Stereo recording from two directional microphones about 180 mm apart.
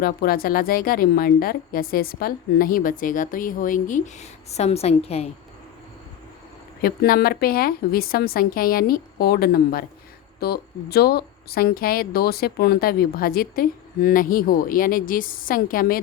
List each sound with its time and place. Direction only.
0.0 s a woman's voice: 55° left (ahead or behind); by 5.3 s 35° left (ahead or behind)
6.8 s speech: 55° left (ahead or behind)